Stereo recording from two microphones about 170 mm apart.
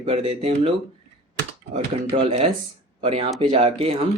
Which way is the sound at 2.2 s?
35° right (ahead or behind).